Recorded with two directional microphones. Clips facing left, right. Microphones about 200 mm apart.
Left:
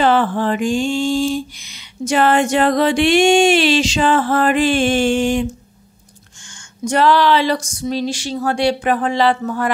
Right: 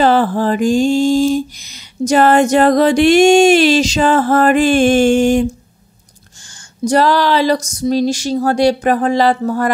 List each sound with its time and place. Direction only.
0.0 s mantra: 40° right (ahead or behind)
6.8 s mantra: 35° right (ahead or behind)